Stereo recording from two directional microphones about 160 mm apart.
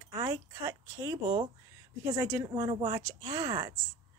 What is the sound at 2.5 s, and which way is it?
Speech, 30° right (ahead or behind).